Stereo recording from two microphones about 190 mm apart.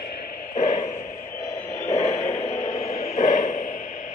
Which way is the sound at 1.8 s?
35° left (ahead or behind).